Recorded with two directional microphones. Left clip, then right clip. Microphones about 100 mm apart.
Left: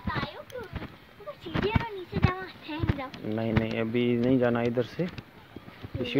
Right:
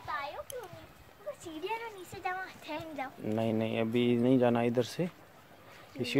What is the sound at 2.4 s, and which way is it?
Speech, 45° right (ahead or behind).